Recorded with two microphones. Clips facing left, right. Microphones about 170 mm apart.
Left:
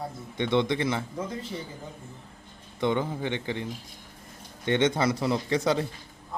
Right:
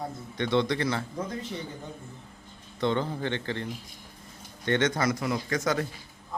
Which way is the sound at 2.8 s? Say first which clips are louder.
Left 1 dB; 15° left (ahead or behind).